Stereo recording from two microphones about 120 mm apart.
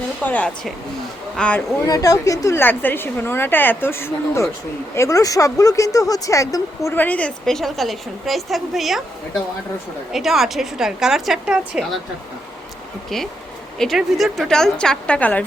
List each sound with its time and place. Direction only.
0.3 s speech: 10° left (ahead or behind)
1.8 s speech: 30° left (ahead or behind); by 9.0 s centre (ahead or behind)
10.1 s a woman's voice: centre (ahead or behind)
13.7 s a woman's voice: centre (ahead or behind)